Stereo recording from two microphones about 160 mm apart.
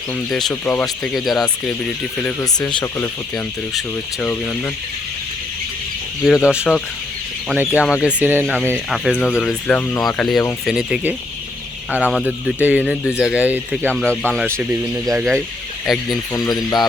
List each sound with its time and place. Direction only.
0.3 s speech: centre (ahead or behind)
2.4 s speech: 25° left (ahead or behind)
3.3 s speech: 5° left (ahead or behind)
6.2 s speech: 5° right (ahead or behind)
8.4 s speech: 5° left (ahead or behind)
13.8 s speech: 5° left (ahead or behind)
14.5 s speech: 20° right (ahead or behind)
15.9 s speech: centre (ahead or behind)
16.3 s speech: 20° left (ahead or behind)